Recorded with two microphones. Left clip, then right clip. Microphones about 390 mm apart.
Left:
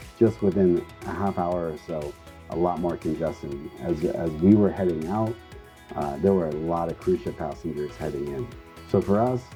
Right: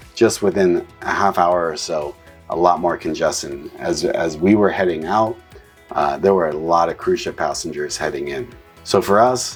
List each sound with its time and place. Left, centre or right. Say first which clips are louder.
0.2 s speech: right 6 dB; centre